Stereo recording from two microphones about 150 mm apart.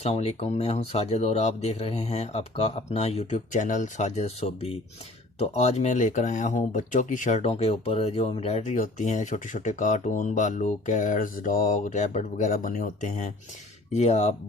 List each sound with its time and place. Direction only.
0.0 s speech: 45° left (ahead or behind)